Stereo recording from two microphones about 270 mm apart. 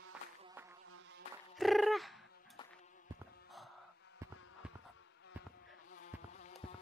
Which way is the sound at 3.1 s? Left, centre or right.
Centre.